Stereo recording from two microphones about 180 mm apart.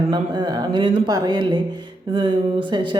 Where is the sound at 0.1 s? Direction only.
25° right (ahead or behind).